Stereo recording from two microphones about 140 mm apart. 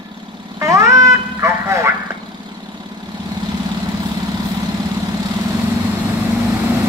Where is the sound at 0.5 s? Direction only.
20° right (ahead or behind).